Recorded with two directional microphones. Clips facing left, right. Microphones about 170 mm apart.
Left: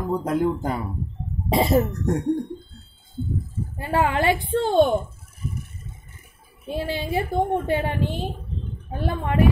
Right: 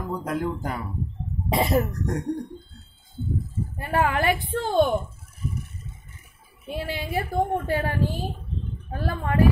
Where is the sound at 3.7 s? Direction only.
25° left (ahead or behind).